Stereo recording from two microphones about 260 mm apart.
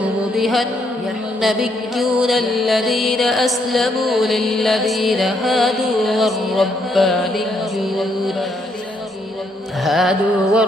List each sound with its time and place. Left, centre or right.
0.3 s music: centre
9.8 s music: centre